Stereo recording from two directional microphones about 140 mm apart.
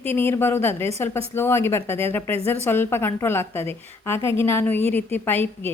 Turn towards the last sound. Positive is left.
turn(degrees=15)  # may be behind; listen again after turning